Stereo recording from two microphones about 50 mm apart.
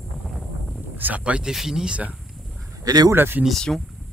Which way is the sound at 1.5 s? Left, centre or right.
Centre.